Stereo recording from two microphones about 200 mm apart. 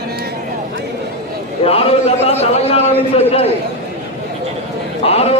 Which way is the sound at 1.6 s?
30° left (ahead or behind).